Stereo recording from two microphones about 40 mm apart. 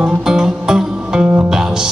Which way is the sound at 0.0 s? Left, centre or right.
Centre.